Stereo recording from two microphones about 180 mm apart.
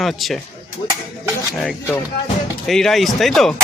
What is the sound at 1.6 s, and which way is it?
Speech, 5° left (ahead or behind).